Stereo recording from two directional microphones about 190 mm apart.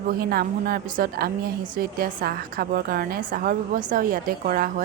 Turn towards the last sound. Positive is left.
turn(degrees=-50)  # may be behind; listen again after turning